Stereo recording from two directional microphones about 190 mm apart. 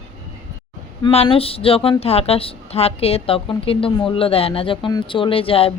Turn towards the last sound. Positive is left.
turn(degrees=30)  # may be behind; listen again after turning